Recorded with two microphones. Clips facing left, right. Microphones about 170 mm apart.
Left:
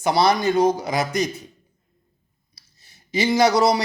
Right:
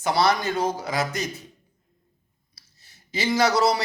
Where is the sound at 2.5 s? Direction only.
15° left (ahead or behind).